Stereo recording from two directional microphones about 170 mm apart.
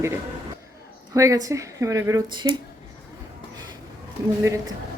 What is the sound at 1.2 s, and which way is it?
A woman's voice, 20° right (ahead or behind).